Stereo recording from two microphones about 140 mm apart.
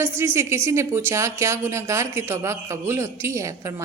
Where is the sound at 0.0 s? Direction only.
20° right (ahead or behind).